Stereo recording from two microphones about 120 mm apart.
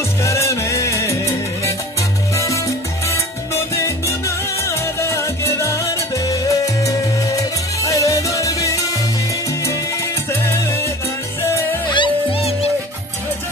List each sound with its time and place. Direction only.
0.2 s music: 25° left (ahead or behind)
10.4 s salsa music: 20° left (ahead or behind)
11.4 s music: 25° left (ahead or behind)
11.9 s music: 45° left (ahead or behind)